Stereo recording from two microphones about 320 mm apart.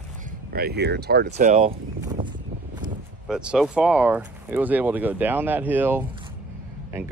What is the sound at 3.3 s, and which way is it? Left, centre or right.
Speech, centre.